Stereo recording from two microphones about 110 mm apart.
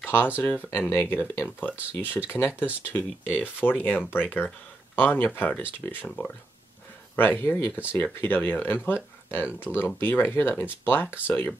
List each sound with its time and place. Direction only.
0.0 s a sound: 20° left (ahead or behind)
0.7 s speech: 20° left (ahead or behind)
7.2 s speech: 20° left (ahead or behind)